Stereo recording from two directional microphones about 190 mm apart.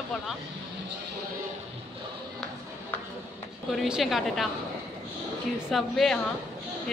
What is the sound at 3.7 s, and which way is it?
Speech, centre (ahead or behind).